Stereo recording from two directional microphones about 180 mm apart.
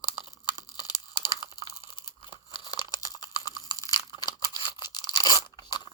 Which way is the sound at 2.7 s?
25° left (ahead or behind).